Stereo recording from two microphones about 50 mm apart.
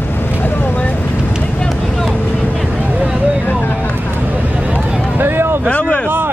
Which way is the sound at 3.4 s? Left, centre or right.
Left.